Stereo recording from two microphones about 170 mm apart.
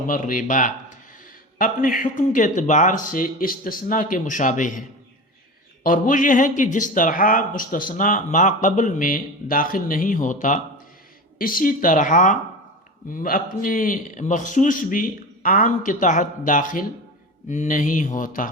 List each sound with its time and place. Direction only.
0.1 s speech: 50° left (ahead or behind)
5.8 s speech: 50° left (ahead or behind)